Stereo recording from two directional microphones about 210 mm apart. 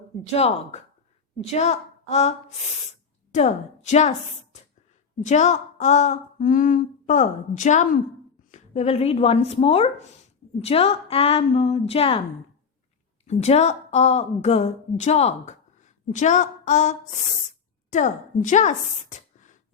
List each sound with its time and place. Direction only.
0.3 s speech: 30° left (ahead or behind)
3.3 s humming: 35° left (ahead or behind)
5.2 s humming: 35° left (ahead or behind)
8.4 s speech: 35° left (ahead or behind)
13.2 s humming: 30° left (ahead or behind)